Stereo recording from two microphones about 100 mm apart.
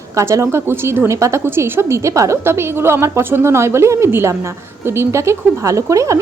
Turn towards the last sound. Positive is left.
turn(degrees=-30)  # may be behind; listen again after turning